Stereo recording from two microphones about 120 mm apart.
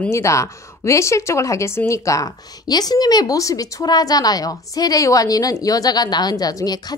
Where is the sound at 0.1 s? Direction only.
25° left (ahead or behind).